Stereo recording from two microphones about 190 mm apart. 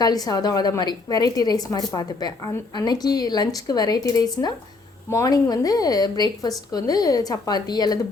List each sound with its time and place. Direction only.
0.0 s a woman's voice: 20° left (ahead or behind)